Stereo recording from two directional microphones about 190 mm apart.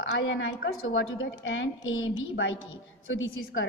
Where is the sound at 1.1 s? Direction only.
90° left.